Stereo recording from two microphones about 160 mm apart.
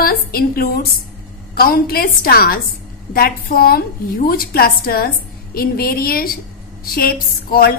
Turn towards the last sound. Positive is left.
turn(degrees=70)  # may be behind; listen again after turning